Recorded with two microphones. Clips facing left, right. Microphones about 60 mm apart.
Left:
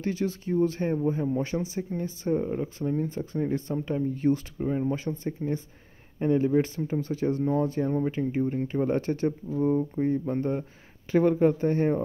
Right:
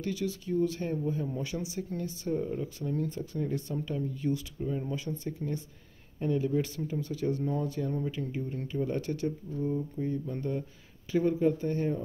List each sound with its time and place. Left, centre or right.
0.0 s speech: left
9.6 s speech: left
11.1 s speech: left